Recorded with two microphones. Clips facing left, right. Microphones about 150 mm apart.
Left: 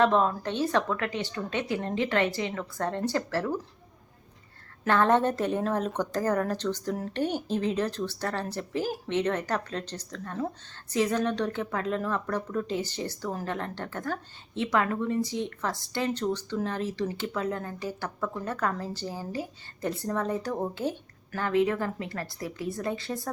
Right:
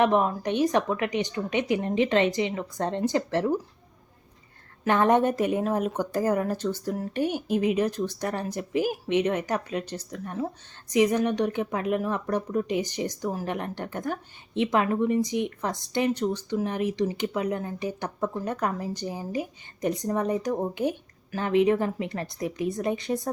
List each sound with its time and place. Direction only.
0.0 s speech: 15° right (ahead or behind)
4.9 s speech: 15° right (ahead or behind)